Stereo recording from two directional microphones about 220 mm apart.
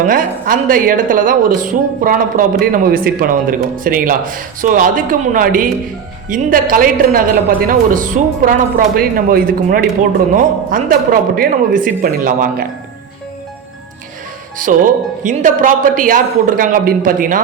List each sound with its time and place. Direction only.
0.0 s speech: 40° right (ahead or behind)
14.6 s speech: 35° right (ahead or behind)